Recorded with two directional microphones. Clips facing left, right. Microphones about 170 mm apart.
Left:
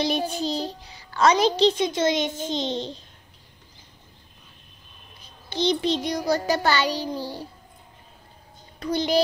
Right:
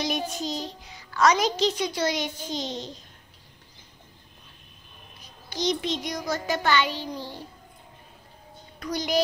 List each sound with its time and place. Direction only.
0.0 s a child's voice: 30° left (ahead or behind)
5.2 s child singing: 30° left (ahead or behind)
8.7 s a child's voice: 30° left (ahead or behind)